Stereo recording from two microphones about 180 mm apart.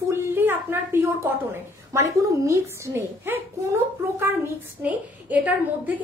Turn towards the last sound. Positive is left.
turn(degrees=-10)  # may be behind; listen again after turning